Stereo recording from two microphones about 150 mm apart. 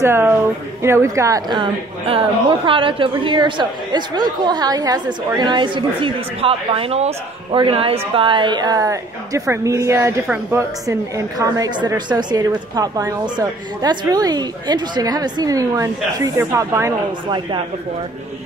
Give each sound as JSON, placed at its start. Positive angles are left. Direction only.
{"t": 0.0, "sound": "a woman's voice", "side_deg": -15}
{"t": 1.6, "sound": "a woman's voice", "side_deg": -35}
{"t": 10.9, "sound": "a woman's voice", "side_deg": -20}